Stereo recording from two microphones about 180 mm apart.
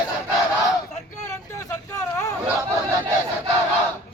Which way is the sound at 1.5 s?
15° left (ahead or behind).